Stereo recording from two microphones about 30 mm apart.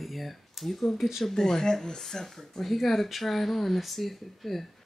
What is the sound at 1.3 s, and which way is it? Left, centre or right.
Speech, centre.